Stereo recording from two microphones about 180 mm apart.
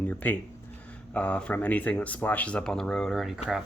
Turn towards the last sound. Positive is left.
turn(degrees=0)  # may be behind; listen again after turning